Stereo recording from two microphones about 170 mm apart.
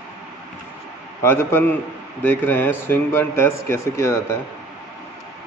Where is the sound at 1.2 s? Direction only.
15° left (ahead or behind).